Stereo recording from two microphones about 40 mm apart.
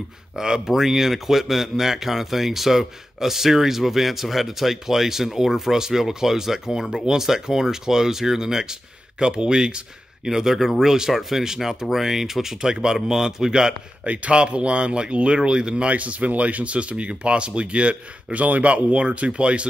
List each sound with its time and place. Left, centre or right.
0.4 s a man's voice: centre
14.0 s speech: right
15.9 s speech: right